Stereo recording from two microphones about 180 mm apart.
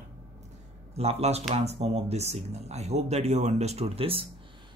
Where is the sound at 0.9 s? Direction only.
35° right (ahead or behind).